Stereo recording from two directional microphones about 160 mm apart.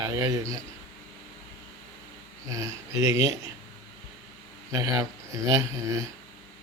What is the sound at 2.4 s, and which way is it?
Speech, 20° right (ahead or behind).